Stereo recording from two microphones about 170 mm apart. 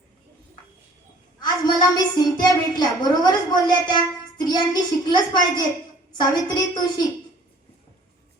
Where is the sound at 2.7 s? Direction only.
25° left (ahead or behind).